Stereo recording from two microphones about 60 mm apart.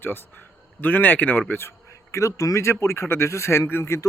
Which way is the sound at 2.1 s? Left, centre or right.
Left.